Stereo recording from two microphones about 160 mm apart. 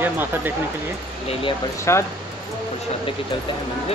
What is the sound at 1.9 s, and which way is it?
Speech, 15° left (ahead or behind).